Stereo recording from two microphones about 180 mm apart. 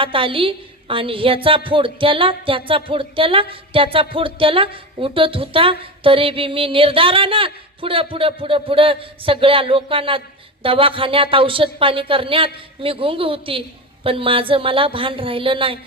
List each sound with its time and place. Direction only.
0.0 s a woman's voice: 30° right (ahead or behind)